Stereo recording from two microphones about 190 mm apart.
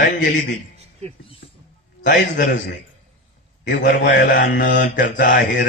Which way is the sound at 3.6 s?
65° left (ahead or behind).